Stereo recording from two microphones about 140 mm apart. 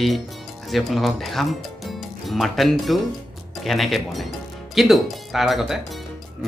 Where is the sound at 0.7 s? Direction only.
Centre (ahead or behind).